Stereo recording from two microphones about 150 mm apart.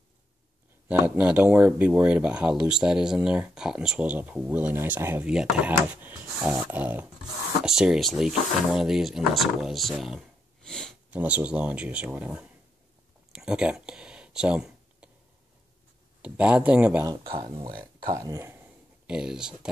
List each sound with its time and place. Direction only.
0.8 s speech: 10° right (ahead or behind)
11.1 s speech: 10° right (ahead or behind)
13.3 s a sound: 5° right (ahead or behind)
16.2 s speech: 5° right (ahead or behind)
17.3 s speech: 35° right (ahead or behind)
18.1 s speech: 20° right (ahead or behind); by 19.7 s 5° right (ahead or behind)